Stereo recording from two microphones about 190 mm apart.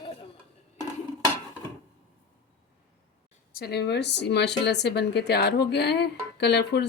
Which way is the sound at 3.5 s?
60° left (ahead or behind).